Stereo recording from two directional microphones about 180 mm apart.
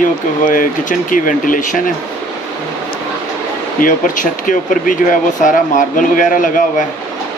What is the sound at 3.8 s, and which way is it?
Speech, 50° left (ahead or behind).